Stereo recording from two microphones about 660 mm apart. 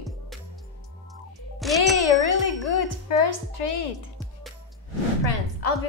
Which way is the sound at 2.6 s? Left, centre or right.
Left.